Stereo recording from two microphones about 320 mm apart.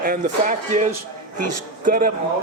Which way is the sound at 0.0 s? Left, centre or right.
Right.